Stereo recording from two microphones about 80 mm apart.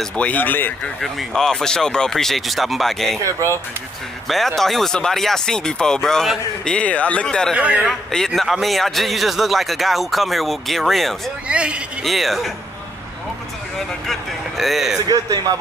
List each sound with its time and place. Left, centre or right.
0.3 s speech: left
1.0 s speech: centre
4.3 s speech: centre
7.5 s a man's voice: centre
8.1 s speech: centre
11.4 s a man's voice: centre
12.0 s speech: centre
14.6 s speech: centre
15.0 s a man's voice: right